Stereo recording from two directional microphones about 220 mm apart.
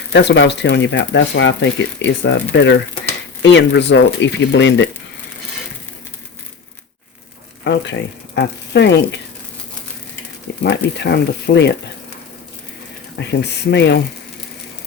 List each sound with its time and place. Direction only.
0.1 s speech: 50° left (ahead or behind)
7.6 s speech: 55° left (ahead or behind)
10.6 s speech: 50° left (ahead or behind)
13.1 s speech: 50° left (ahead or behind)